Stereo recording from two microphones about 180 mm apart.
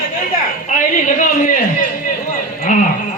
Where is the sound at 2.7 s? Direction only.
45° left (ahead or behind).